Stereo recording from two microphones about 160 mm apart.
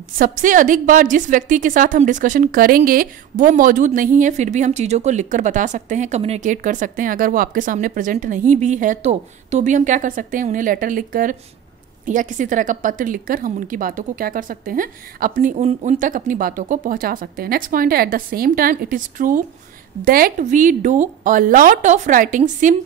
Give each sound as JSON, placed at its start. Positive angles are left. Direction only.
{"t": 0.2, "sound": "a woman's voice", "side_deg": -55}